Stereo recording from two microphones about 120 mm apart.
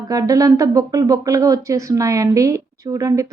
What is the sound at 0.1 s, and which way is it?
Speech, 30° right (ahead or behind).